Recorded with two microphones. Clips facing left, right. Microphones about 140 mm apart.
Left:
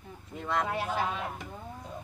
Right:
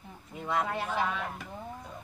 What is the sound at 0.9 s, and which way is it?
Speech, 15° left (ahead or behind).